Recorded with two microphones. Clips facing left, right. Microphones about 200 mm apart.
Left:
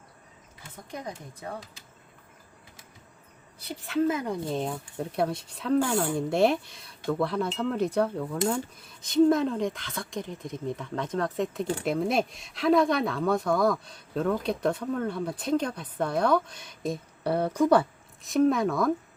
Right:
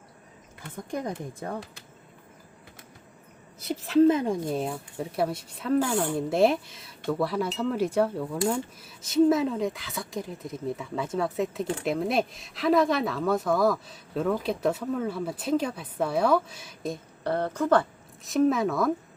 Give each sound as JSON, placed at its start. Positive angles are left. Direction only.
{"t": 0.9, "sound": "speech", "side_deg": -50}
{"t": 3.8, "sound": "speech", "side_deg": -35}
{"t": 18.2, "sound": "speech", "side_deg": 0}